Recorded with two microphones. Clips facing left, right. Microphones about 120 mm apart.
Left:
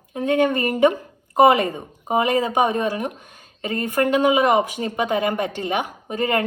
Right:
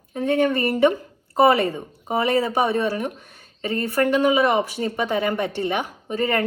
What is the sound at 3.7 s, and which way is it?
Speech, 45° left (ahead or behind).